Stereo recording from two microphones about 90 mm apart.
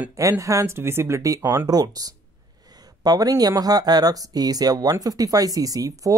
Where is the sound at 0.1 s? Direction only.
35° right (ahead or behind).